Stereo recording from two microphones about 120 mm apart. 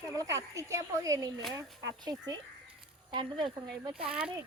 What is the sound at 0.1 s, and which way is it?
Speech, 25° right (ahead or behind).